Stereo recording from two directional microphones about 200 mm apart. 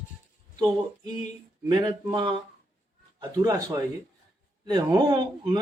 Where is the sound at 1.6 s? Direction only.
20° right (ahead or behind).